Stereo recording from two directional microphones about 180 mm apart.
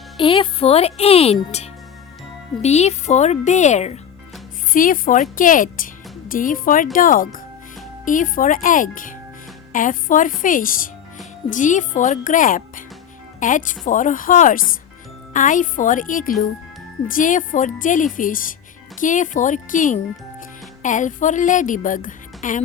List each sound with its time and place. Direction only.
0.2 s a child's voice: 30° left (ahead or behind); by 22.6 s 45° left (ahead or behind)